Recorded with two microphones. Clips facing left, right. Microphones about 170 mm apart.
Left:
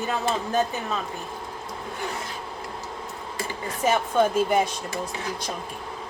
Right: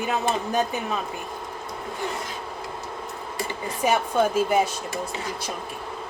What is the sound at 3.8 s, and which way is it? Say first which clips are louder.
Speech: even; 10° right (ahead or behind).